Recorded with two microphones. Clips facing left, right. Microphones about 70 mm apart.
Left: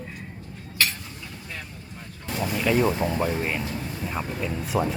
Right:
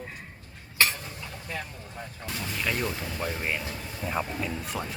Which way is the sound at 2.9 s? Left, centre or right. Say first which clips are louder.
Left 10 dB; left.